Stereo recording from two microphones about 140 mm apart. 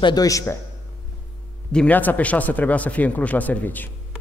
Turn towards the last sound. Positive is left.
turn(degrees=10)  # may be behind; listen again after turning